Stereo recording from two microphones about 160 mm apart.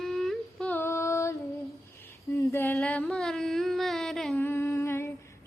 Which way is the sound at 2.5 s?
10° left (ahead or behind).